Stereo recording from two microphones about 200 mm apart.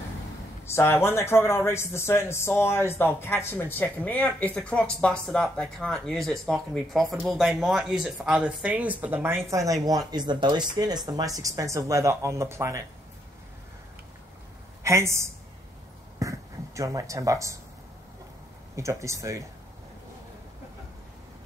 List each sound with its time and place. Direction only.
0.7 s speech: 10° left (ahead or behind); by 12.8 s 15° right (ahead or behind)
14.8 s speech: 15° right (ahead or behind)
18.8 s speech: 15° right (ahead or behind)